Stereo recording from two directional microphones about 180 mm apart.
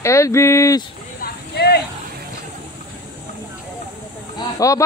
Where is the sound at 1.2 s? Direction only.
65° left (ahead or behind).